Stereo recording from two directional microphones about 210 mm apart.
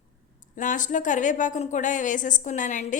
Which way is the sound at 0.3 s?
40° left (ahead or behind).